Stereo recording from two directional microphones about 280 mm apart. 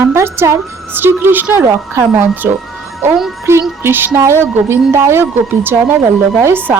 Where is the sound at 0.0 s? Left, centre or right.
Centre.